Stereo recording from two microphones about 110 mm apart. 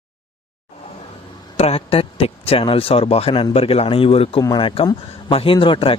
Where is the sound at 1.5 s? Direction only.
65° left (ahead or behind).